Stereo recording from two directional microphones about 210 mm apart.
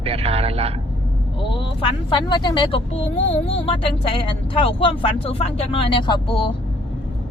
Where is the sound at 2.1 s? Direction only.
20° left (ahead or behind).